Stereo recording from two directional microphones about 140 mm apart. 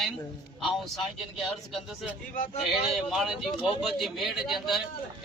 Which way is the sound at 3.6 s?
40° left (ahead or behind).